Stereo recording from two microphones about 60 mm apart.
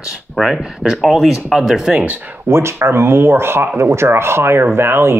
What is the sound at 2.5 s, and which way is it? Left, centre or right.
Speech, right.